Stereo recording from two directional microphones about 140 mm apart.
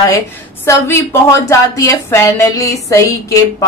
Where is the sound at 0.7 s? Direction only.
20° left (ahead or behind).